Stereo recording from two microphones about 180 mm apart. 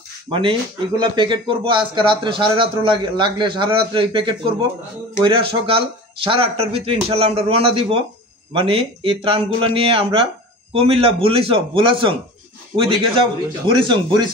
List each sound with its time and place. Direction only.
0.3 s speech: 30° right (ahead or behind)